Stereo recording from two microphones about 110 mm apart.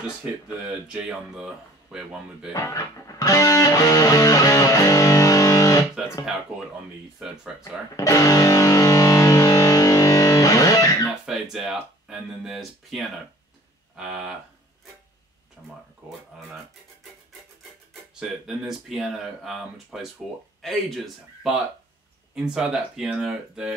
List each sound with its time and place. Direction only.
0.8 s speech: 10° right (ahead or behind)
2.5 s speech: 30° left (ahead or behind)
7.2 s speech: 5° right (ahead or behind)
7.9 s music: 30° left (ahead or behind)
11.1 s speech: 5° right (ahead or behind)
15.6 s speech: 10° right (ahead or behind)
18.2 s speech: 5° right (ahead or behind)